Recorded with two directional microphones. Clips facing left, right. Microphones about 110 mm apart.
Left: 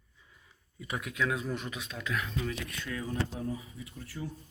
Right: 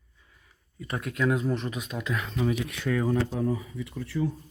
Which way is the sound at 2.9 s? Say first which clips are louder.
Right 12 dB; 85° right.